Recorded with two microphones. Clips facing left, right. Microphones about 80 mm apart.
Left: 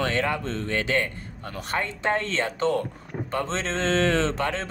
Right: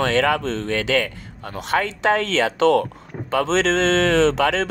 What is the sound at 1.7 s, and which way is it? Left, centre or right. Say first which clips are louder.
Speech: right 7 dB; right.